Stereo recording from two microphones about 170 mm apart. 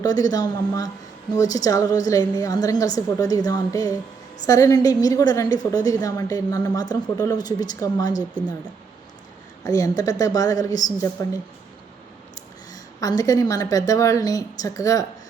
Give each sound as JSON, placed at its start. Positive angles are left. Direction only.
{"t": 0.0, "sound": "a woman's voice", "side_deg": 20}
{"t": 8.2, "sound": "a woman's voice", "side_deg": -10}
{"t": 9.6, "sound": "a woman's voice", "side_deg": 20}
{"t": 12.7, "sound": "a woman's voice", "side_deg": 20}